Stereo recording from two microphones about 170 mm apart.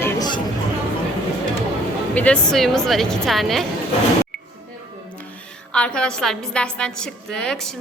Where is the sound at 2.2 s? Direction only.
5° left (ahead or behind).